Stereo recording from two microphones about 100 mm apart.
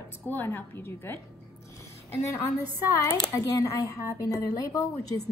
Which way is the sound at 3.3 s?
35° left (ahead or behind).